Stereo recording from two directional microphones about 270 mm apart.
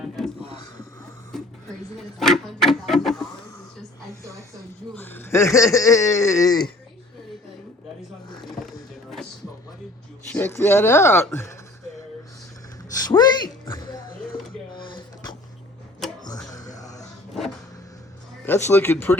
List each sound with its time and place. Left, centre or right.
1.3 s music: centre
2.0 s a sound: centre
4.9 s speech: centre
8.5 s music: centre
10.3 s speech: centre
13.0 s a sound: centre
14.7 s dishes: centre
16.5 s a sound: centre
18.4 s speech: centre